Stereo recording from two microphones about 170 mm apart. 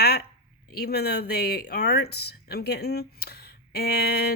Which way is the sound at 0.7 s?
70° left (ahead or behind).